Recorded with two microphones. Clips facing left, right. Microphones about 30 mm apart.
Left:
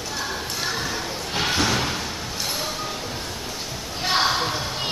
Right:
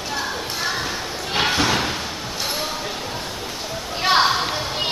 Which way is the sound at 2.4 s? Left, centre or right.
Centre.